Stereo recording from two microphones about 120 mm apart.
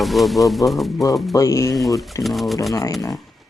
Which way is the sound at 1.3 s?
25° left (ahead or behind).